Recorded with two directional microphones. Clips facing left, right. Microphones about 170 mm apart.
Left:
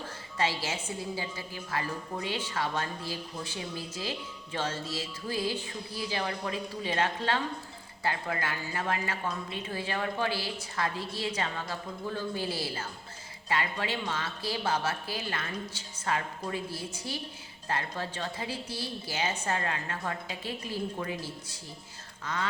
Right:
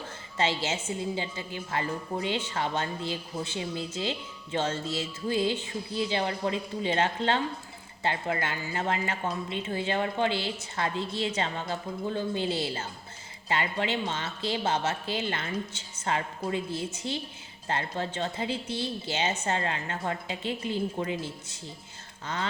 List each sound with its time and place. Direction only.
0.3 s speech: 25° right (ahead or behind)